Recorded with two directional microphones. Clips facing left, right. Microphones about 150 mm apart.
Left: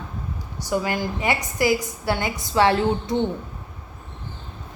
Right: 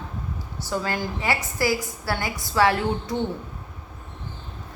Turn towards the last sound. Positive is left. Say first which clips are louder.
# left 4 dB
turn(degrees=25)  # may be behind; listen again after turning